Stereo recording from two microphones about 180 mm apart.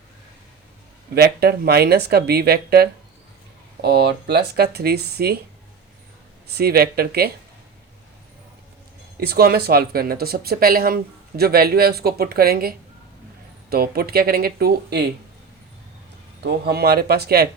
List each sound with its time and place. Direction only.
1.1 s speech: 60° right (ahead or behind)
6.5 s speech: 60° right (ahead or behind)
9.2 s speech: 60° right (ahead or behind)
16.4 s speech: 65° right (ahead or behind)